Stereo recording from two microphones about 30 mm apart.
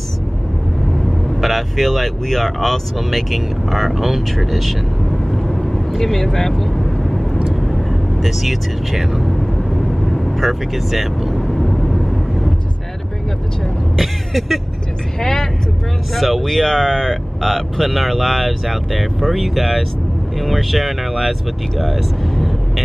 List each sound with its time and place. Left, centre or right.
1.4 s speech: centre
5.1 s vehicle: centre
9.6 s vehicle: centre
10.3 s speech: centre
11.3 s vehicle: centre
13.9 s speech: centre
15.1 s speech: left
16.2 s speech: centre
16.6 s speech: centre